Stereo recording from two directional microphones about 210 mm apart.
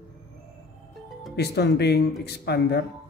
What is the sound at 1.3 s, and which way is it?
Speech, 50° left (ahead or behind).